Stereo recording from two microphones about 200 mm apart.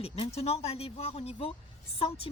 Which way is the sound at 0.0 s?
30° left (ahead or behind).